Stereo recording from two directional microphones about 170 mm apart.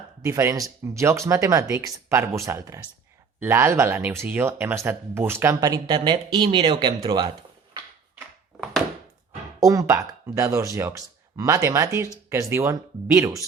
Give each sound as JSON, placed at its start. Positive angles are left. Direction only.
{"t": 0.2, "sound": "speech", "side_deg": -15}
{"t": 9.6, "sound": "speech", "side_deg": -20}